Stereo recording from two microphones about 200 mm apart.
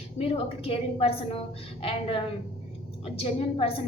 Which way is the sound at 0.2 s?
30° left (ahead or behind).